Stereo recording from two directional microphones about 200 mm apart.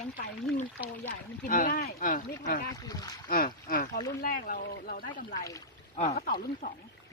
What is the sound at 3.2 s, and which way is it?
Speech, 45° left (ahead or behind).